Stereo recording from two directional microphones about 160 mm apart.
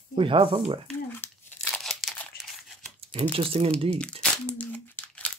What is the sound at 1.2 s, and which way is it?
Crumpling, 15° left (ahead or behind).